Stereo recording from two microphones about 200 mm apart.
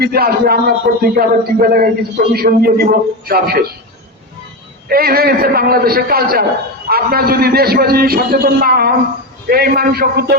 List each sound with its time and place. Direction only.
0.0 s a man's voice: 50° right (ahead or behind)
4.9 s a man's voice: 50° right (ahead or behind)